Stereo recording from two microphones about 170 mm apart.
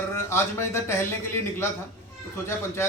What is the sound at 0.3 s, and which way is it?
A man's voice, 15° left (ahead or behind).